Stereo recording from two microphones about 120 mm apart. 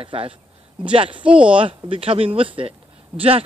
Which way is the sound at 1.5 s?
45° right (ahead or behind).